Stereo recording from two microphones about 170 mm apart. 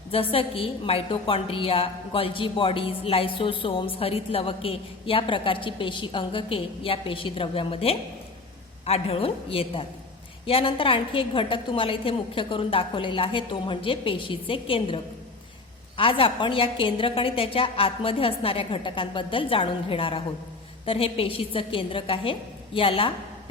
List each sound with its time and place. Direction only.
0.1 s a woman's voice: 35° left (ahead or behind)